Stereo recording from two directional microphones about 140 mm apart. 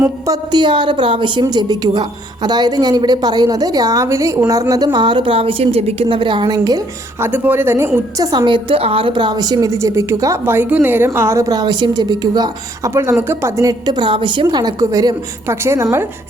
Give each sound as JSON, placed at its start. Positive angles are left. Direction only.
{"t": 0.0, "sound": "a woman's voice", "side_deg": -30}
{"t": 7.3, "sound": "a woman's voice", "side_deg": -15}
{"t": 8.3, "sound": "a woman's voice", "side_deg": -35}
{"t": 12.9, "sound": "a woman's voice", "side_deg": -20}
{"t": 14.4, "sound": "a woman's voice", "side_deg": -25}